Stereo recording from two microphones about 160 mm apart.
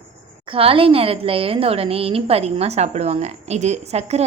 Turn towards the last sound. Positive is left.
turn(degrees=-40)  # may be behind; listen again after turning